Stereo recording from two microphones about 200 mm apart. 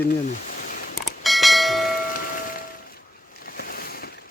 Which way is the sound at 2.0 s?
45° left (ahead or behind).